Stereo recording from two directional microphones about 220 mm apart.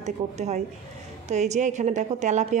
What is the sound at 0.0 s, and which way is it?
A woman's voice, 30° right (ahead or behind).